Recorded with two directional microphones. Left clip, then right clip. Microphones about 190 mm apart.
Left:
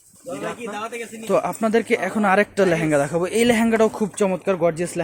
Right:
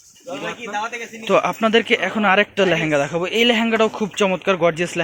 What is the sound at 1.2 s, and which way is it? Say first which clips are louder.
Speech: right 4 dB; centre (ahead or behind).